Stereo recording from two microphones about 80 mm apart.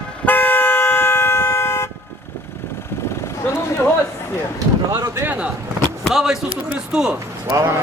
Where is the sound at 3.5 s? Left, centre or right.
Left.